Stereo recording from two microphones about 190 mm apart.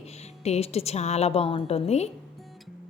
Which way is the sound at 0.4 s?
35° left (ahead or behind).